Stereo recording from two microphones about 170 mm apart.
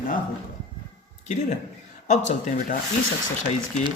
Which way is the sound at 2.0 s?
45° left (ahead or behind).